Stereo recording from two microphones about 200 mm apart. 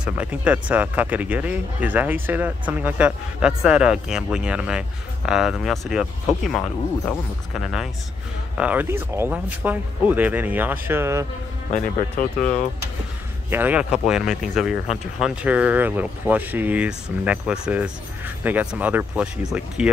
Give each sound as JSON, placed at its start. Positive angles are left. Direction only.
{"t": 0.0, "sound": "speech", "side_deg": -5}
{"t": 12.2, "sound": "speech", "side_deg": 45}
{"t": 13.5, "sound": "speech", "side_deg": -10}